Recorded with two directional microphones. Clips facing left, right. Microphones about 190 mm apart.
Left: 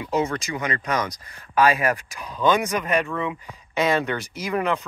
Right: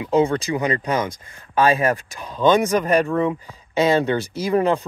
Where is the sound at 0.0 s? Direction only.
30° right (ahead or behind).